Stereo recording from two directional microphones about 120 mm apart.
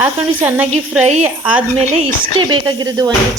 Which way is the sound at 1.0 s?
65° right (ahead or behind).